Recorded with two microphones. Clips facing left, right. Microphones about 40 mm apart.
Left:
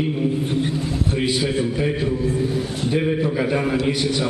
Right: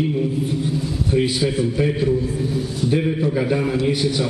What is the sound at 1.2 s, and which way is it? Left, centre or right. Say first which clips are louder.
A man's voice: right 2 dB; centre.